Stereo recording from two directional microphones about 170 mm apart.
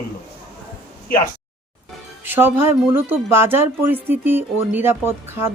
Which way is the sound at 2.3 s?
15° right (ahead or behind).